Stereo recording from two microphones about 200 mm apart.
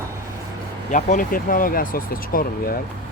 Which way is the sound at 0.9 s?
40° left (ahead or behind).